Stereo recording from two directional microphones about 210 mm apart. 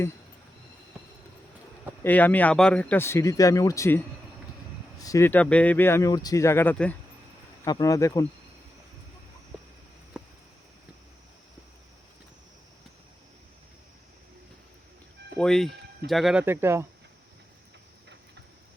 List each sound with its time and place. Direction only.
2.0 s speech: 10° left (ahead or behind)
10.1 s a sound: 5° right (ahead or behind)
15.4 s speech: centre (ahead or behind)